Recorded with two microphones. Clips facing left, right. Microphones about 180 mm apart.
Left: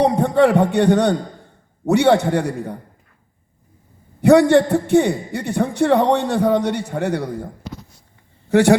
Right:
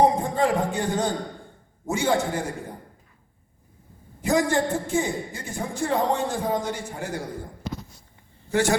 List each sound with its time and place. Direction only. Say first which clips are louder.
0.0 s a man's voice: left 6 dB; 70° left (ahead or behind)
4.2 s a man's voice: left 11 dB; 70° left (ahead or behind)
8.4 s speech: left 9 dB; 65° left (ahead or behind)